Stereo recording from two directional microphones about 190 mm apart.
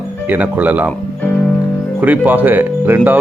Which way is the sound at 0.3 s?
10° right (ahead or behind).